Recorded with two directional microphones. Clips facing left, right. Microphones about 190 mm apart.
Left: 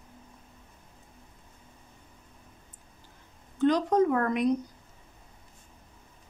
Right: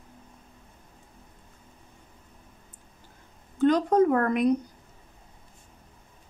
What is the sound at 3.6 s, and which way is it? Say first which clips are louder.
Speech: right 3 dB; 55° right (ahead or behind).